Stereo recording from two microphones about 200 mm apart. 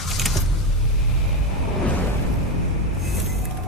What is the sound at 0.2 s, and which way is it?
Vehicle, centre (ahead or behind).